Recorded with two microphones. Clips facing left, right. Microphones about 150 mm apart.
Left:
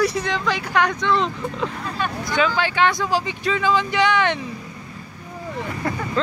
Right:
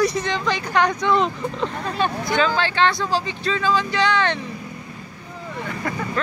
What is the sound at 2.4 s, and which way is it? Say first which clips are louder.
Speech: even; 10° left (ahead or behind).